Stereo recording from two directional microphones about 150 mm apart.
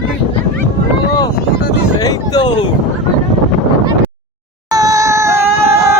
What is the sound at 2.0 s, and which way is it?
Speech, 25° left (ahead or behind).